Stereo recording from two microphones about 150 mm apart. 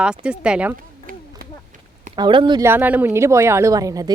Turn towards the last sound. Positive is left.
turn(degrees=-25)  # may be behind; listen again after turning